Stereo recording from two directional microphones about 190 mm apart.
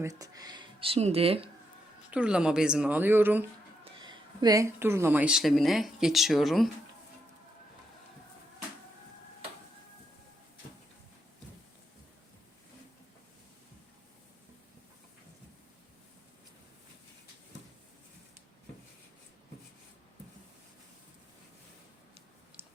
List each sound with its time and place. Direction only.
0.0 s speech: 15° right (ahead or behind)
2.0 s speech: 5° right (ahead or behind)
4.0 s speech: 20° right (ahead or behind); by 6.7 s centre (ahead or behind)
22.6 s a sound: 10° right (ahead or behind)